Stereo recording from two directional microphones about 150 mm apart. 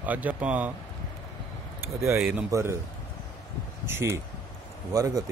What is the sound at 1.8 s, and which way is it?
Speech, 20° right (ahead or behind).